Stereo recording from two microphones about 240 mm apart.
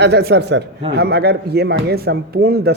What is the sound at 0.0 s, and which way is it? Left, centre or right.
Speech, right.